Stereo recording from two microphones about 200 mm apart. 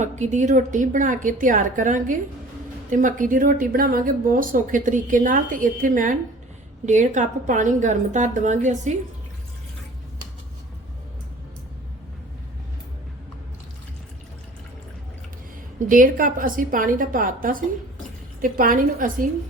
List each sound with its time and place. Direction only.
0.0 s speech: 35° right (ahead or behind)
15.9 s a woman's voice: 45° right (ahead or behind)